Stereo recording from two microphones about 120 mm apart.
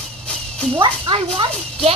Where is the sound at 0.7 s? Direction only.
45° right (ahead or behind).